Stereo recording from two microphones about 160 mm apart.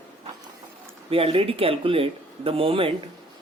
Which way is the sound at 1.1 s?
35° right (ahead or behind).